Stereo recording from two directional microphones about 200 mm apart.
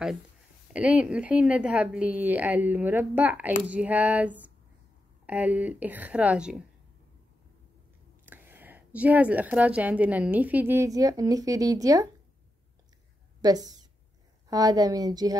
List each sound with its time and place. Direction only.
0.7 s a woman's voice: 5° right (ahead or behind)
8.3 s a woman's voice: 10° right (ahead or behind)
13.4 s a woman's voice: 20° right (ahead or behind)